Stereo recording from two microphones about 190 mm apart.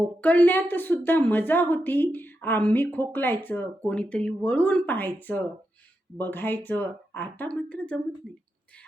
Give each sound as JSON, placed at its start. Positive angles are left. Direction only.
{"t": 0.0, "sound": "a woman's voice", "side_deg": 10}